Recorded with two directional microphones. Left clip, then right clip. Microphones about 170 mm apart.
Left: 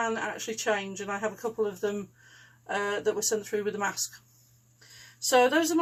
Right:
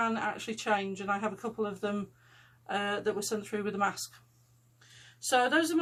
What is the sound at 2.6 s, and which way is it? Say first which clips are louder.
Speech: left 3 dB; 15° right (ahead or behind).